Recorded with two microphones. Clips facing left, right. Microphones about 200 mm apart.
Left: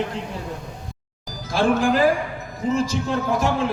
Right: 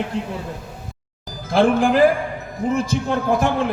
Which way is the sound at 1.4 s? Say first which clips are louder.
Right 4 dB; 55° right (ahead or behind).